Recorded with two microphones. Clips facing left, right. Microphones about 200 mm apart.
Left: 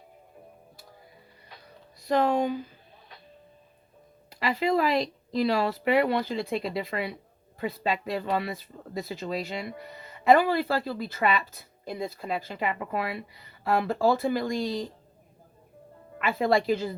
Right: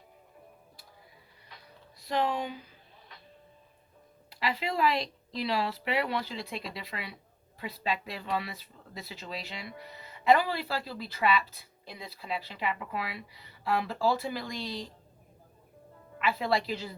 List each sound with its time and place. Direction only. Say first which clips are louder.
2.0 s speech: left 7 dB; 45° left (ahead or behind)
4.3 s speech: left 7 dB; 45° left (ahead or behind)
16.2 s speech: left 5 dB; 45° left (ahead or behind)